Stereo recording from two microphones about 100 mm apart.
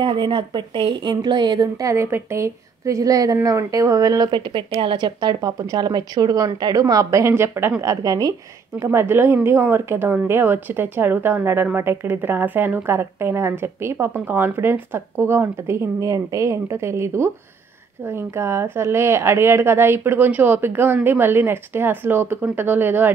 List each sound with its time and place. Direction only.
0.0 s speech: 55° right (ahead or behind)
1.8 s speech: 30° right (ahead or behind)
4.3 s speech: 50° right (ahead or behind); by 7.7 s 25° right (ahead or behind)
7.8 s a woman's voice: 35° right (ahead or behind); by 23.1 s 20° right (ahead or behind)